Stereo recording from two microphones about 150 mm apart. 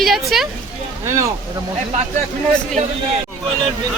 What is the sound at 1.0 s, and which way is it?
Speech, 20° right (ahead or behind).